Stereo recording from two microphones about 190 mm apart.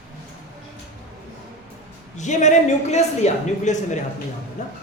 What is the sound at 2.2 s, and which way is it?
A man's voice, 40° left (ahead or behind).